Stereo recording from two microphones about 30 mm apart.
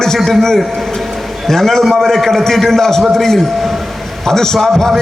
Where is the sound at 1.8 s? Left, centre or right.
Centre.